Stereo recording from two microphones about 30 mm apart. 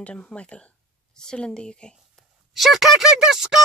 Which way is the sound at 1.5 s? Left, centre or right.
Left.